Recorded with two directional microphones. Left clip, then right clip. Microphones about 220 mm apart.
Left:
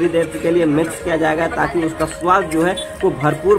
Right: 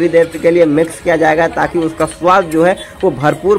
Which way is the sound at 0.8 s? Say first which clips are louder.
Right 6 dB; 20° right (ahead or behind).